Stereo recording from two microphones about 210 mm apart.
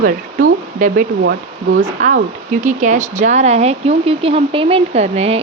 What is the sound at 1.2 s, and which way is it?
Speech, 60° right (ahead or behind).